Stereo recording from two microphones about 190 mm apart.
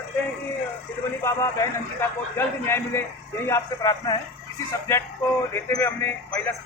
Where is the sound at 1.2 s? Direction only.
15° left (ahead or behind).